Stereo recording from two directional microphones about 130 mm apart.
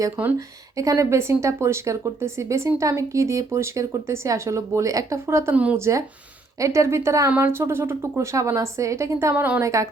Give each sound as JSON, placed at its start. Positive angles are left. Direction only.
{"t": 0.2, "sound": "a woman's voice", "side_deg": -20}